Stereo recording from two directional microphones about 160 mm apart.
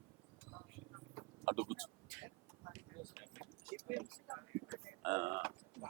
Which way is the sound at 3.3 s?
20° right (ahead or behind).